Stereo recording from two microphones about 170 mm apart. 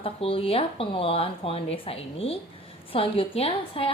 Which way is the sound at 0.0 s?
35° left (ahead or behind).